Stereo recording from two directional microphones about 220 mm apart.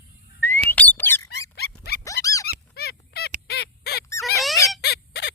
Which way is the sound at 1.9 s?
45° left (ahead or behind).